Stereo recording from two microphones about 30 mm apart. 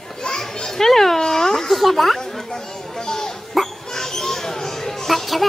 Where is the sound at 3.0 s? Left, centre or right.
Centre.